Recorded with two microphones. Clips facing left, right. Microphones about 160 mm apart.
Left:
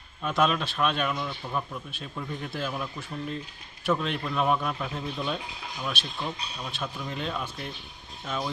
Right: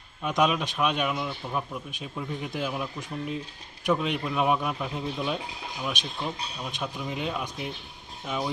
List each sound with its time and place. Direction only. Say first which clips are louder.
0.2 s a man's voice: right 1 dB; 15° right (ahead or behind)